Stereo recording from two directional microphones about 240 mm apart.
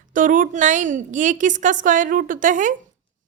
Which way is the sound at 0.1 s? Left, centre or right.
Right.